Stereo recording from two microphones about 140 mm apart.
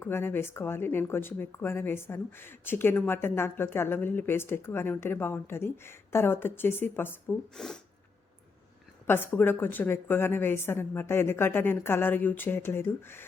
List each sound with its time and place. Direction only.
0.0 s speech: 15° left (ahead or behind)
7.5 s speech: 5° left (ahead or behind)
9.0 s speech: 15° left (ahead or behind)